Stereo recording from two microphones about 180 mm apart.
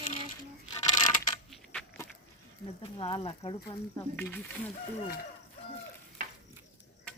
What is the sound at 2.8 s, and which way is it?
Speech, 30° left (ahead or behind).